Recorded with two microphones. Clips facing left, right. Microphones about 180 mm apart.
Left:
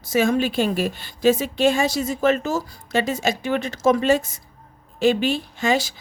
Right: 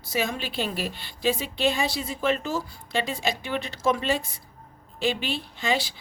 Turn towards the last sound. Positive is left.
turn(degrees=45)  # may be behind; listen again after turning